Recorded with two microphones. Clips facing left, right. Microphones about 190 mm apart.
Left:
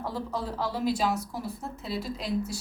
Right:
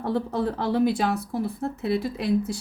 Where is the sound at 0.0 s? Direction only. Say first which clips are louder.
Right 7 dB; 60° right (ahead or behind).